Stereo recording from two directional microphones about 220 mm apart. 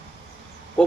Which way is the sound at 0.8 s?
5° left (ahead or behind).